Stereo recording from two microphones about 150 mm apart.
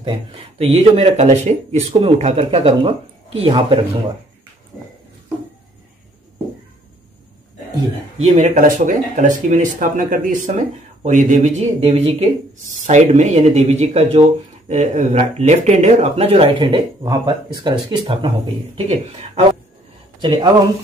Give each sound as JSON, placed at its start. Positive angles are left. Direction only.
{"t": 0.0, "sound": "speech", "side_deg": -35}
{"t": 8.2, "sound": "speech", "side_deg": -50}
{"t": 8.6, "sound": "speech", "side_deg": -60}
{"t": 12.5, "sound": "speech", "side_deg": -55}
{"t": 20.2, "sound": "speech", "side_deg": -35}